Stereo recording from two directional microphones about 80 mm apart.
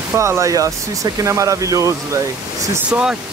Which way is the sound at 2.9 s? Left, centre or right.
Centre.